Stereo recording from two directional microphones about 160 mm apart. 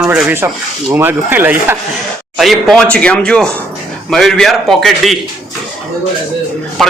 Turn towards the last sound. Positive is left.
turn(degrees=0)  # may be behind; listen again after turning